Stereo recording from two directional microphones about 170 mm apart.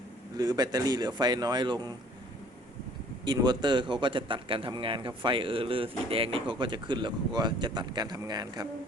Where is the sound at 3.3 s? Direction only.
25° right (ahead or behind).